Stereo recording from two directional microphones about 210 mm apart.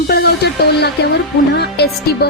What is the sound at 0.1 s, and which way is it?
Speech, 50° left (ahead or behind).